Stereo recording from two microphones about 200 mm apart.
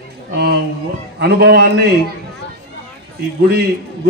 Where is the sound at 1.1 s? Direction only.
55° right (ahead or behind).